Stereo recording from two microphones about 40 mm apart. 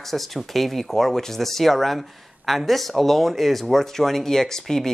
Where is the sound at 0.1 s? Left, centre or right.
Centre.